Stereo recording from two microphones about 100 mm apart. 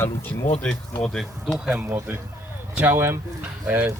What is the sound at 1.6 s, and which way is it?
Speech, 20° right (ahead or behind).